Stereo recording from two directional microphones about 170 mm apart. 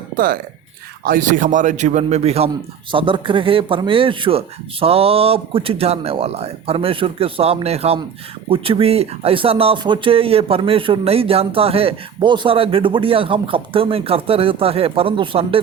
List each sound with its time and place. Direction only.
1.0 s a man's voice: 50° right (ahead or behind); by 15.6 s 30° right (ahead or behind)